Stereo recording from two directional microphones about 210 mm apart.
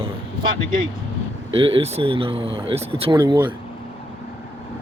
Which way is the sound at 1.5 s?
25° right (ahead or behind).